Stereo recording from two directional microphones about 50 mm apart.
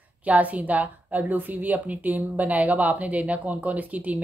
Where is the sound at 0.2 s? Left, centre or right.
Right.